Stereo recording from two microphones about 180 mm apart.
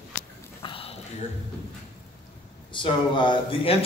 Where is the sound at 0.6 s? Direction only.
30° left (ahead or behind).